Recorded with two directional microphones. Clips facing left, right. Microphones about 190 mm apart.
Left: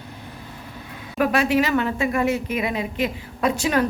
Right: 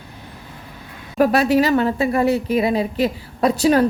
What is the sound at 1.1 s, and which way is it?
A woman's voice, 35° right (ahead or behind).